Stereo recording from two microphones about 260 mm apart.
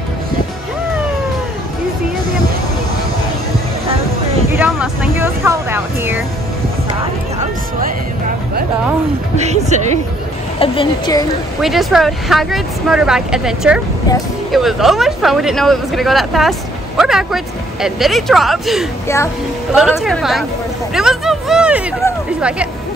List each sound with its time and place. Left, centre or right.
4.5 s vehicle: centre
9.4 s speech: right
10.6 s a woman's voice: centre
11.6 s speech: centre
20.9 s hubbub: centre